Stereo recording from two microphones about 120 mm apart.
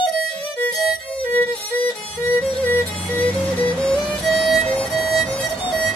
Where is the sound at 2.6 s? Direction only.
15° left (ahead or behind).